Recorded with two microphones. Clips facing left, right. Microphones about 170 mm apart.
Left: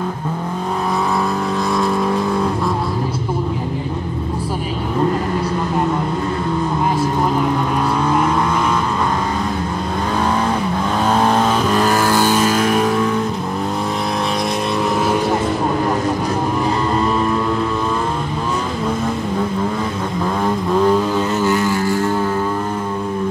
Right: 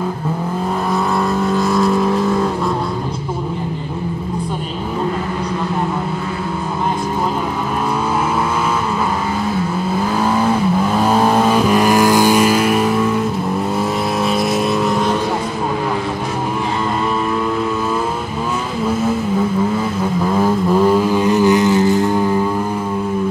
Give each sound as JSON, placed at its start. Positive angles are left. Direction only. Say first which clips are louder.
{"t": 1.5, "sound": "vehicle", "louder": "right 5 dB", "side_deg": 0}
{"t": 11.0, "sound": "vehicle", "louder": "even", "side_deg": -5}
{"t": 21.1, "sound": "a sound", "louder": "right 4 dB", "side_deg": -15}